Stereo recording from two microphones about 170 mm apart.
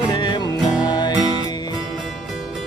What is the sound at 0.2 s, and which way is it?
Music, 25° left (ahead or behind).